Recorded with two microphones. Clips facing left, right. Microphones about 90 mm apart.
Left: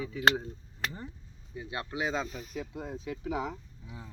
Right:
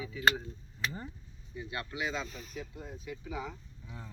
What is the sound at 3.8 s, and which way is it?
Speech, 5° left (ahead or behind).